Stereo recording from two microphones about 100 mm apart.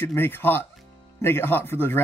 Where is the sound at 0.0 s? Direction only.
20° left (ahead or behind).